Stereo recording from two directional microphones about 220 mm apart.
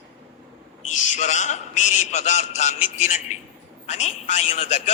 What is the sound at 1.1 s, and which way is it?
A man's voice, 35° left (ahead or behind).